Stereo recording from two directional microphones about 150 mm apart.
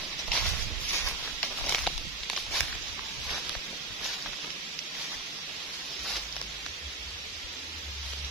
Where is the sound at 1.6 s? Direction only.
5° left (ahead or behind).